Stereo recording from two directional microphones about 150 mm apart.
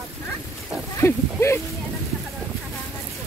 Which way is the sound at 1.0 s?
15° left (ahead or behind).